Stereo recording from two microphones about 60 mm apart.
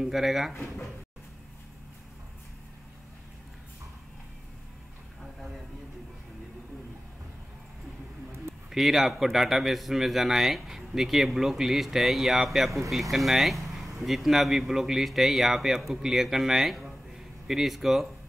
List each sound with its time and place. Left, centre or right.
0.0 s a man's voice: centre
8.6 s a man's voice: centre